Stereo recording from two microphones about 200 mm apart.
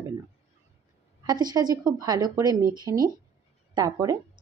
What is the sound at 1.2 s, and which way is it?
Speech, 20° right (ahead or behind).